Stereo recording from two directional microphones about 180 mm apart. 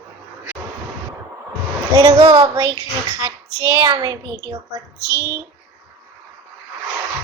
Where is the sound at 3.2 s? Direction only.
15° right (ahead or behind).